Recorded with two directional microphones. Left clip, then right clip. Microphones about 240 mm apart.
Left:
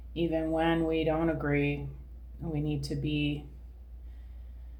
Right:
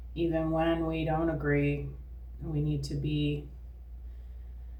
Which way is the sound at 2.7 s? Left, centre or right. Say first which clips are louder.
Left 2 dB; left.